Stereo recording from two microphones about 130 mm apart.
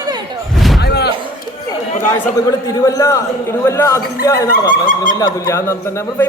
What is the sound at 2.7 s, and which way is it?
A man's voice, 25° left (ahead or behind).